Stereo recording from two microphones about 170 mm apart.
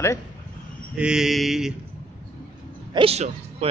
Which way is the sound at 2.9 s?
35° right (ahead or behind).